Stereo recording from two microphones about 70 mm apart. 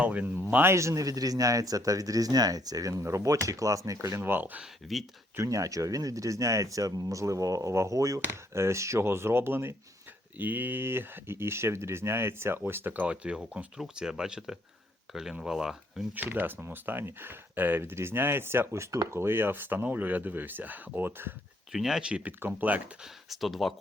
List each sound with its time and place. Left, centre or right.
0.0 s speech: right
0.5 s speech: right
3.0 s speech: right
4.2 s speech: right
4.8 s speech: centre
5.4 s speech: right
8.2 s speech: right
10.3 s speech: right; by 16.0 s centre
16.1 s speech: right
21.7 s speech: centre
22.3 s speech: right
23.3 s speech: centre